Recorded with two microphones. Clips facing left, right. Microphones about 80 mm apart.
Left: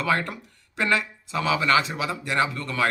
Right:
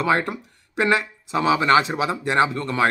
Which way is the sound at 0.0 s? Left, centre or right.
Right.